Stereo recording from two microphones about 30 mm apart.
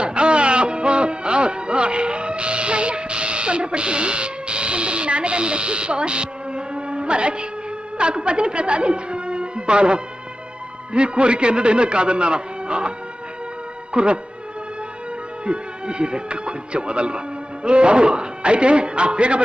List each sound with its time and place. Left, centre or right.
0.0 s music: right
7.9 s a woman's voice: right
13.9 s music: right
15.4 s a man's voice: right